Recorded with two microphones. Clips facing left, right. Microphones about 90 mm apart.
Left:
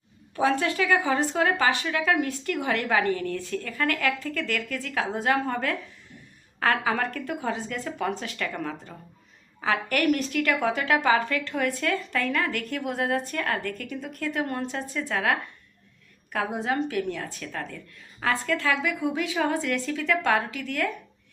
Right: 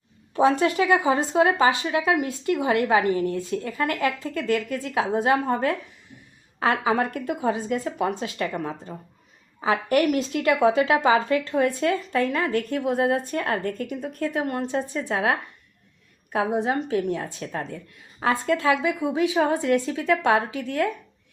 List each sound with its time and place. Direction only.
0.3 s a woman's voice: 25° right (ahead or behind)